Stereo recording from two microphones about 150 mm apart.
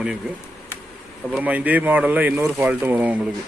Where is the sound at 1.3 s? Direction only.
10° right (ahead or behind).